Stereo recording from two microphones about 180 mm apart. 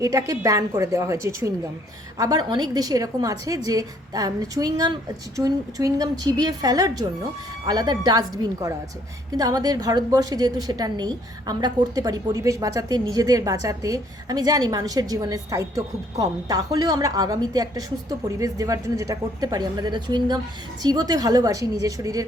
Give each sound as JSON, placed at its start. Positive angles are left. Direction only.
{"t": 0.0, "sound": "a woman's voice", "side_deg": -20}